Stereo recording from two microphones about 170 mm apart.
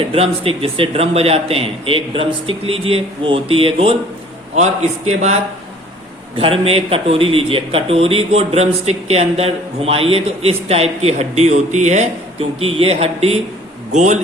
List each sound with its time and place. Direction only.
0.1 s a man's voice: 35° right (ahead or behind)